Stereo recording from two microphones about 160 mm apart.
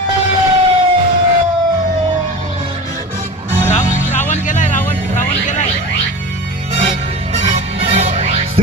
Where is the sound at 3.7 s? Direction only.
50° left (ahead or behind).